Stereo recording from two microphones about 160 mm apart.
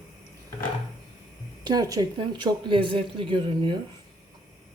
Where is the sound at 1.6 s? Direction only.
25° right (ahead or behind).